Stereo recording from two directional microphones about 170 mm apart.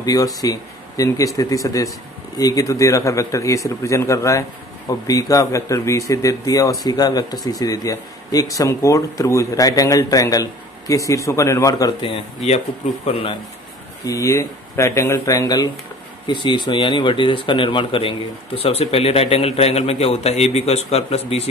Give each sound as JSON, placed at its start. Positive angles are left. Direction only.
{"t": 0.0, "sound": "a man's voice", "side_deg": 20}
{"t": 12.4, "sound": "speech", "side_deg": 35}
{"t": 14.0, "sound": "a man's voice", "side_deg": 20}